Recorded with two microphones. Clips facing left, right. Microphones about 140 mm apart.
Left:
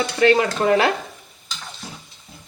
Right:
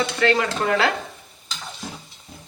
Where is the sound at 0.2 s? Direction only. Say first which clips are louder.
Left 5 dB; 25° left (ahead or behind).